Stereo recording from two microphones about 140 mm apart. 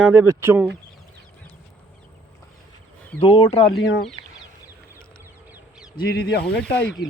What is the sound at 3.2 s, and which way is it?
Speech, 45° left (ahead or behind).